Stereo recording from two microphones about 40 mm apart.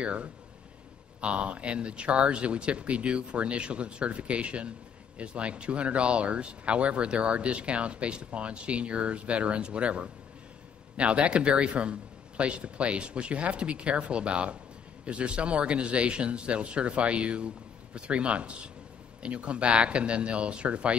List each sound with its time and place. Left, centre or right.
0.0 s speech: right